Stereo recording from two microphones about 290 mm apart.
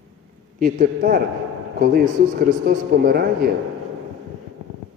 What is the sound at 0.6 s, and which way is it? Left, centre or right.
Speech, right.